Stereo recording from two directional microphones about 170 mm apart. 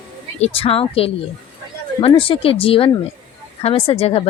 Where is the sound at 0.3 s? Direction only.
35° left (ahead or behind).